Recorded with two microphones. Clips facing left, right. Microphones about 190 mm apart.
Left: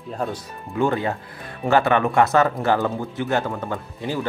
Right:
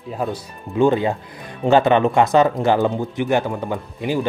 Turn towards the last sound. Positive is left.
turn(degrees=-15)  # may be behind; listen again after turning